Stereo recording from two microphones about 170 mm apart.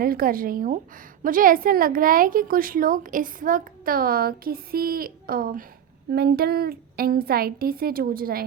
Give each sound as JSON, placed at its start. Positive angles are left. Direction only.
{"t": 0.0, "sound": "a woman's voice", "side_deg": -60}